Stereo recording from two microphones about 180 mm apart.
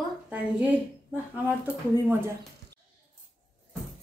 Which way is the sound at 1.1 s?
10° right (ahead or behind).